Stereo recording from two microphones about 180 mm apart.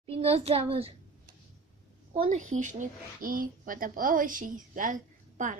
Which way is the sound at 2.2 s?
45° right (ahead or behind).